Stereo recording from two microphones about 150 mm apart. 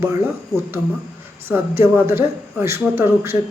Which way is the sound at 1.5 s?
15° right (ahead or behind).